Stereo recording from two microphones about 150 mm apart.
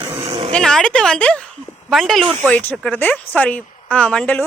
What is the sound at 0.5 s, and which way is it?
Speech, 5° left (ahead or behind).